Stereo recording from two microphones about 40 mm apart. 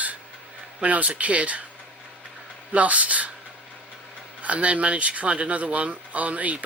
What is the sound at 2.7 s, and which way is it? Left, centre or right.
Speech, right.